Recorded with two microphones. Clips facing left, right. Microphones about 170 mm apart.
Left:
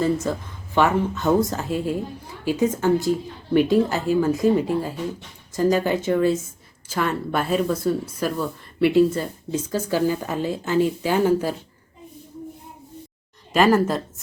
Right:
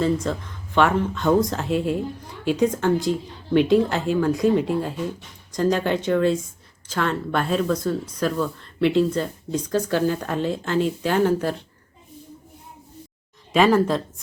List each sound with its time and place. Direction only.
0.0 s a woman's voice: 5° left (ahead or behind)
13.5 s a woman's voice: 5° left (ahead or behind)